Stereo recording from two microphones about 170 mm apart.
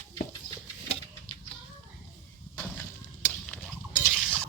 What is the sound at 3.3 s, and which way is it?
Turkey, 10° left (ahead or behind).